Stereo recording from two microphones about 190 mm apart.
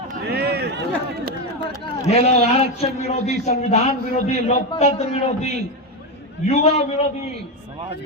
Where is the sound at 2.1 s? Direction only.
35° left (ahead or behind).